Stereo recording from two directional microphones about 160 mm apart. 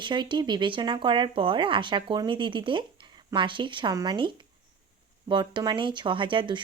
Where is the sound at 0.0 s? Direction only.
30° right (ahead or behind).